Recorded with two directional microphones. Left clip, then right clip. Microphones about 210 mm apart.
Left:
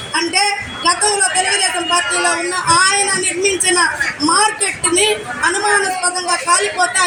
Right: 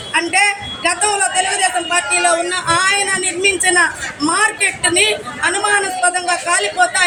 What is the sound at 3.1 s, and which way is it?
Speech, 20° right (ahead or behind).